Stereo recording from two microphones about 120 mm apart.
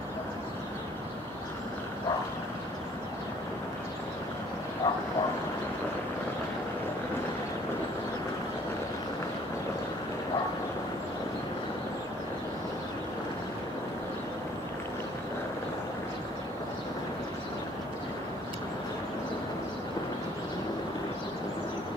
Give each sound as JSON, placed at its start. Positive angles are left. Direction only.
{"t": 4.8, "sound": "bow-wow", "side_deg": 35}